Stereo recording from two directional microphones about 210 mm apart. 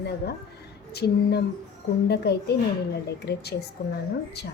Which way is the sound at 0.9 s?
50° left (ahead or behind).